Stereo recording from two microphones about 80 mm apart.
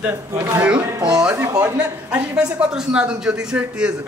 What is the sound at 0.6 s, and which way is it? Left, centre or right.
A man's voice, centre.